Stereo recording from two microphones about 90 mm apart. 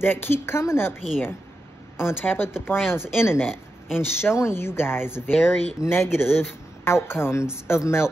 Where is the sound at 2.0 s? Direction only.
25° left (ahead or behind).